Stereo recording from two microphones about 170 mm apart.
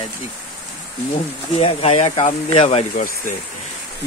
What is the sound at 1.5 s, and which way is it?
Speech, 35° left (ahead or behind).